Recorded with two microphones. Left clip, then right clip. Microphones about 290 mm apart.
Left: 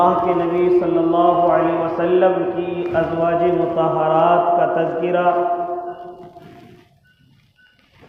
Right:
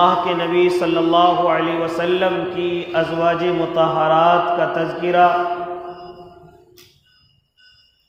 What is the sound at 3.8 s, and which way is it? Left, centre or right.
Mantra, right.